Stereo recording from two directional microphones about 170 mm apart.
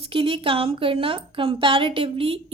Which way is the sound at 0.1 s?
30° right (ahead or behind).